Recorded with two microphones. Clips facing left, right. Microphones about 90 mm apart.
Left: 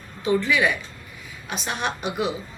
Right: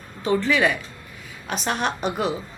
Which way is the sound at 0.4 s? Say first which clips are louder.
Right 1 dB; 40° right (ahead or behind).